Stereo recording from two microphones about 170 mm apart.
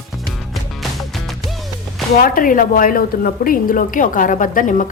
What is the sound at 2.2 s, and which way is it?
A woman's voice, 55° left (ahead or behind).